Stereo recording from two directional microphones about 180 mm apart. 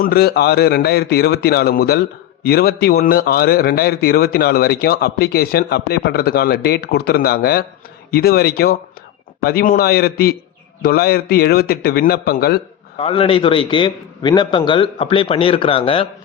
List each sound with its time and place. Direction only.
0.0 s a man's voice: 60° left (ahead or behind)
13.0 s a man's voice: 30° left (ahead or behind)